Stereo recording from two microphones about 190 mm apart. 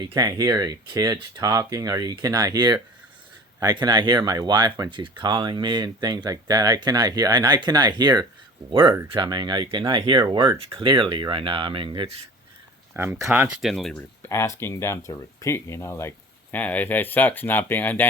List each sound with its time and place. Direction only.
0.1 s speech: 20° right (ahead or behind)
12.9 s speech: 15° right (ahead or behind); by 14.3 s 5° left (ahead or behind)
14.3 s speech: 15° left (ahead or behind)